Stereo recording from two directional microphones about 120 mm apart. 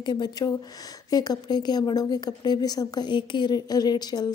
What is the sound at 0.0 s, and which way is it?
A woman's voice, 35° left (ahead or behind).